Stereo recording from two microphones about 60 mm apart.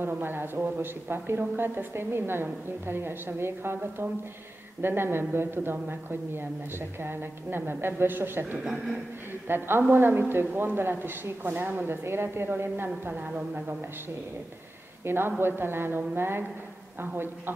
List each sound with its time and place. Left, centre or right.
0.2 s a woman's voice: right
8.6 s a man's voice: centre
9.3 s a woman's voice: right
12.0 s a woman's voice: right
13.1 s a woman's voice: right
15.0 s a woman's voice: right